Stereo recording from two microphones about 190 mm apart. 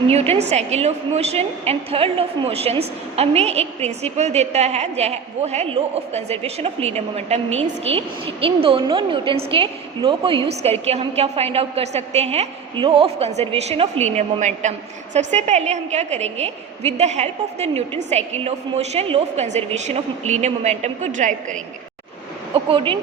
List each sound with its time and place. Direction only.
0.1 s a woman's voice: 35° right (ahead or behind)
22.5 s speech: 25° right (ahead or behind)